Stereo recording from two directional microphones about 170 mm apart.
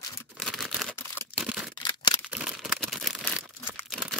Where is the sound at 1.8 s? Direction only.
25° left (ahead or behind).